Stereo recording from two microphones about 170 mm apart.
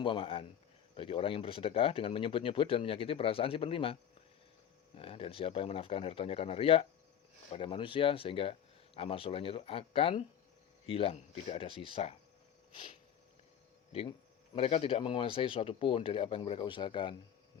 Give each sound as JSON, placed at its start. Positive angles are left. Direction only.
{"t": 0.0, "sound": "speech", "side_deg": 30}
{"t": 4.9, "sound": "speech", "side_deg": 35}
{"t": 12.7, "sound": "a sound", "side_deg": 30}
{"t": 14.5, "sound": "speech", "side_deg": 35}